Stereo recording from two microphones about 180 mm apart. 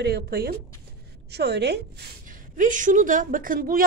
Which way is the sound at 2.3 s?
45° right (ahead or behind).